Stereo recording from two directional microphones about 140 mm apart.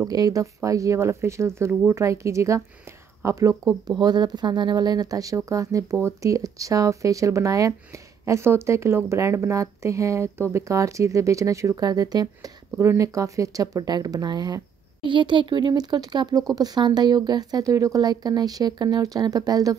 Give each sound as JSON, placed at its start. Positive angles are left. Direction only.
{"t": 0.0, "sound": "speech", "side_deg": -25}